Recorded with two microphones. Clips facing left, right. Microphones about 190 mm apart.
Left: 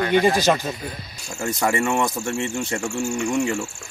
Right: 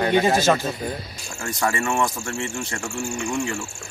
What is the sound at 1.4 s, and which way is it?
Speech, 20° left (ahead or behind).